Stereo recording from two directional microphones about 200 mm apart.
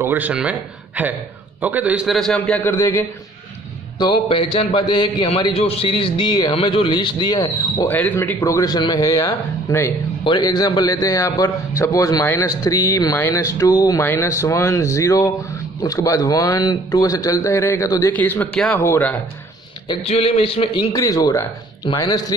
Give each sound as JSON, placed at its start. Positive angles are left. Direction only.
{"t": 0.0, "sound": "a man's voice", "side_deg": -10}
{"t": 19.9, "sound": "a man's voice", "side_deg": 30}